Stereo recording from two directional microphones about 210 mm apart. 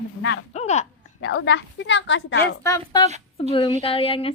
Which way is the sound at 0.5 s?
30° left (ahead or behind).